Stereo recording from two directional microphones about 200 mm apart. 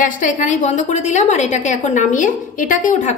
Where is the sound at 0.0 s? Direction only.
40° left (ahead or behind).